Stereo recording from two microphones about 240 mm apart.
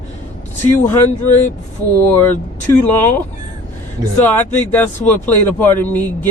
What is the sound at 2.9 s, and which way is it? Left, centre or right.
Speech, centre.